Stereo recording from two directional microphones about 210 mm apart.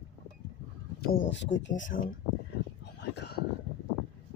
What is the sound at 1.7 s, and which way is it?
Speech, 40° left (ahead or behind).